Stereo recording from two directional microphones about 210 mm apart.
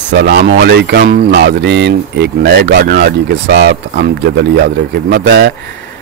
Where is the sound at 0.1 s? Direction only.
55° right (ahead or behind).